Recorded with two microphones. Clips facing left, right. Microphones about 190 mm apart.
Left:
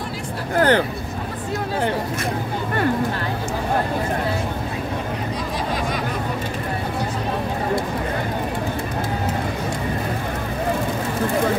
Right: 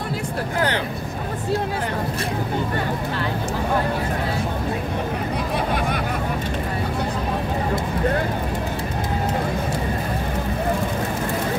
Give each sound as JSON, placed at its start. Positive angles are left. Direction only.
{"t": 0.6, "sound": "speech", "side_deg": 50}